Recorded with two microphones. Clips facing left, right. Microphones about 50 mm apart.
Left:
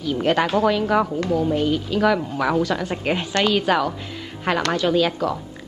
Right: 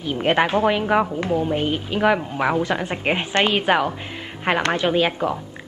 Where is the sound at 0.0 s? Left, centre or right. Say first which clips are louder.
Right 1 dB; right.